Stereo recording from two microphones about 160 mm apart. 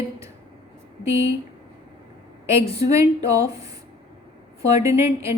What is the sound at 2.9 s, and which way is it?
Speech, 20° right (ahead or behind).